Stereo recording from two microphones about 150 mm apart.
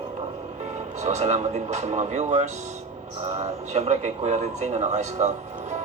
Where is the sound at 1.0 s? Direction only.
50° right (ahead or behind).